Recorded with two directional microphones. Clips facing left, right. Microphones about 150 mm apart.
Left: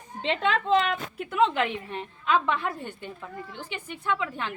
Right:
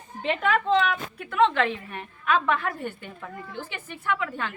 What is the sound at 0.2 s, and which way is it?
A woman's voice, 25° left (ahead or behind).